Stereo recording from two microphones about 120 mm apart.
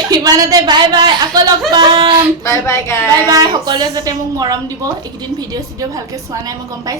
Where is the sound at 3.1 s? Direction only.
35° right (ahead or behind).